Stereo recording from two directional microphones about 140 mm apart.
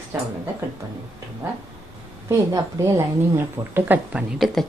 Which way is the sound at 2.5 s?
20° right (ahead or behind).